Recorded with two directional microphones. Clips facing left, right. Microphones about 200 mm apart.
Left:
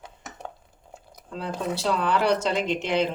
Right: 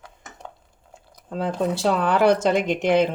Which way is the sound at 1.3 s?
50° right (ahead or behind).